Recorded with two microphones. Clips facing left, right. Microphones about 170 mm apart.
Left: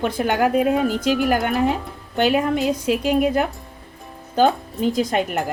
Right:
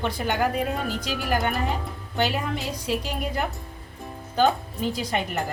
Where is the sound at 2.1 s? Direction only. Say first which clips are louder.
Left 8 dB; 55° left (ahead or behind).